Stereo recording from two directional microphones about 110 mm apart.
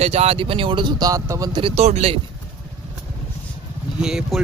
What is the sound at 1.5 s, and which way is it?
Speech, 60° right (ahead or behind).